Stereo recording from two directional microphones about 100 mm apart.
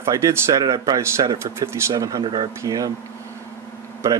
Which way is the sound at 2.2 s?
50° right (ahead or behind).